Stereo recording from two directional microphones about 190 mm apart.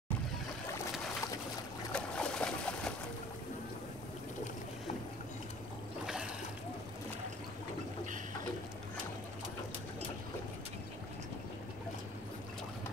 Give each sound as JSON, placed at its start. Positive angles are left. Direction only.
{"t": 1.9, "sound": "boat", "side_deg": 5}
{"t": 6.0, "sound": "splash", "side_deg": -5}